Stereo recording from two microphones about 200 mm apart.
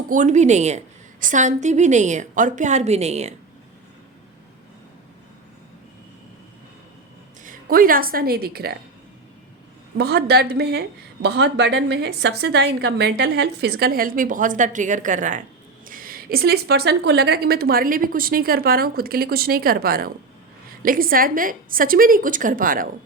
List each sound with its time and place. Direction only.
0.1 s a woman's voice: 35° right (ahead or behind)
7.4 s a woman's voice: 45° right (ahead or behind)
10.0 s a woman's voice: 50° right (ahead or behind)